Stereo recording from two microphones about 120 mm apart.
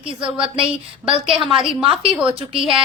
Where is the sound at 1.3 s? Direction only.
5° right (ahead or behind).